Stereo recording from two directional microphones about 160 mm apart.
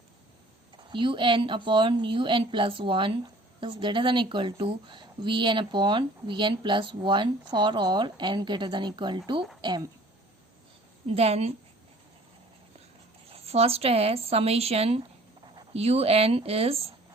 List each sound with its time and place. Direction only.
0.9 s a woman's voice: 30° right (ahead or behind)
11.1 s a woman's voice: 40° right (ahead or behind)
13.3 s a woman's voice: 40° right (ahead or behind)